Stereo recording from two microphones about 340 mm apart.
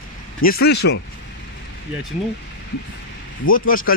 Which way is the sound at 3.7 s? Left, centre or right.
Left.